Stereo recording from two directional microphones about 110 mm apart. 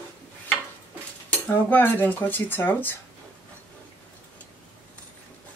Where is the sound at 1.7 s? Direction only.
20° left (ahead or behind).